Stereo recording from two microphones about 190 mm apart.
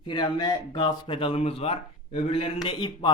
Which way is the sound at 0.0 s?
25° left (ahead or behind).